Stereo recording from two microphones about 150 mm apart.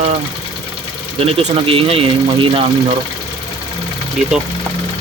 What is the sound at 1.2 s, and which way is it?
Speech, 40° right (ahead or behind).